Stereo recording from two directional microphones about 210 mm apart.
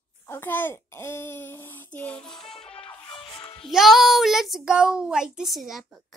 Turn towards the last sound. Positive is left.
turn(degrees=0)  # may be behind; listen again after turning